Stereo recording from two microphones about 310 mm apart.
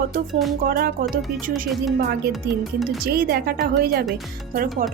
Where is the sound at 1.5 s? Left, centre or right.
Centre.